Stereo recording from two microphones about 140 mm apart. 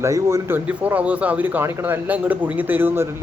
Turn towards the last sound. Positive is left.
turn(degrees=-15)  # may be behind; listen again after turning